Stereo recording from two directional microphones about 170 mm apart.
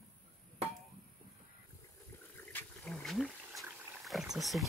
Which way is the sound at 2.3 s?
10° left (ahead or behind).